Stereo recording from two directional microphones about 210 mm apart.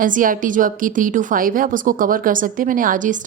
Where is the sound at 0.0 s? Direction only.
40° right (ahead or behind).